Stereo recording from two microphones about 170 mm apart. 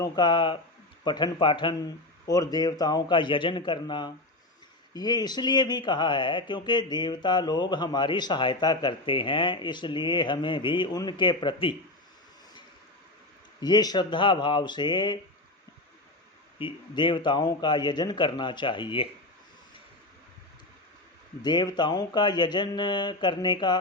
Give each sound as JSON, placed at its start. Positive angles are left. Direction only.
{"t": 0.0, "sound": "speech", "side_deg": 25}
{"t": 13.6, "sound": "speech", "side_deg": 25}
{"t": 16.6, "sound": "speech", "side_deg": 30}
{"t": 21.4, "sound": "speech", "side_deg": 25}